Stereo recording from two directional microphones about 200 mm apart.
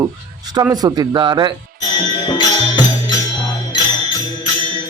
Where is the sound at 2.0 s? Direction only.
20° left (ahead or behind).